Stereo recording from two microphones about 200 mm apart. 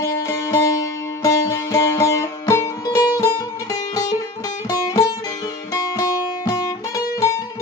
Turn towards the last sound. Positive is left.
turn(degrees=15)  # may be behind; listen again after turning